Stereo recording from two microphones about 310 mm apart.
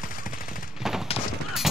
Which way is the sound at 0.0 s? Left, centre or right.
Left.